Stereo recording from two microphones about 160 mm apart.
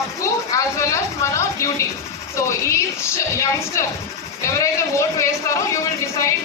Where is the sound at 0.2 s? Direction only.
20° left (ahead or behind).